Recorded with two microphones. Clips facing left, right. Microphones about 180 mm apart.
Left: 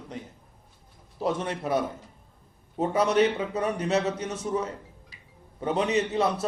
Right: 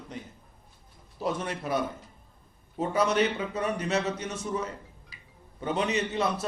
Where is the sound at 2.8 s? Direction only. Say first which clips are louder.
Left 3 dB; 30° left (ahead or behind).